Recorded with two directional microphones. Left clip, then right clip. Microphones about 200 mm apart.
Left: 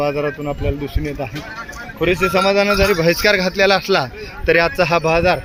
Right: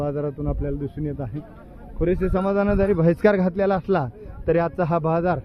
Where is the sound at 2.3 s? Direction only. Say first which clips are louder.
Left 8 dB; 20° right (ahead or behind).